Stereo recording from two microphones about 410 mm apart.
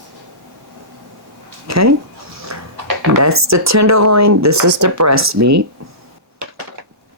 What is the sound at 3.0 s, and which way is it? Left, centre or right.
Speech, right.